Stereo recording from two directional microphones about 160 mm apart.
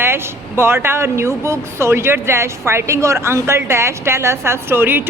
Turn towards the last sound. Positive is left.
turn(degrees=-15)  # may be behind; listen again after turning